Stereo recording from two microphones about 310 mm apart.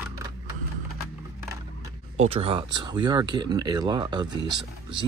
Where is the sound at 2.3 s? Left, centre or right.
Centre.